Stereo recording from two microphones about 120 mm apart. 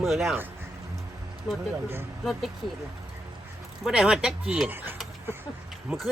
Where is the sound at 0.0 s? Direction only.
Centre (ahead or behind).